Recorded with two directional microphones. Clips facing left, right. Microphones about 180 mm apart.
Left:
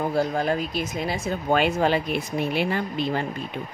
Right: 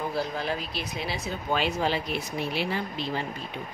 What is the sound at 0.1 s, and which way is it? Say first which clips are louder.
Speech: left 6 dB; 45° left (ahead or behind).